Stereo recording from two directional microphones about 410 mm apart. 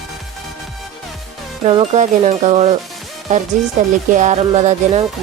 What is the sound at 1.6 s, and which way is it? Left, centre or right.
Music, centre.